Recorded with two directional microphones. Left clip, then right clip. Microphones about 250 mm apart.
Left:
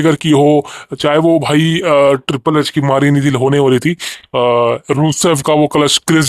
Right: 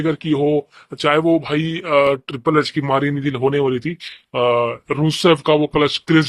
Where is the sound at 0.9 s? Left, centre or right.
Left.